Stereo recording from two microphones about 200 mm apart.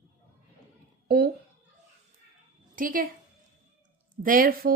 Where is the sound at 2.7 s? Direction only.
45° right (ahead or behind).